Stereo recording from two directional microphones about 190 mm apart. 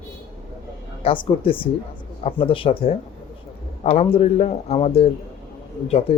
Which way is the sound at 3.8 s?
35° left (ahead or behind).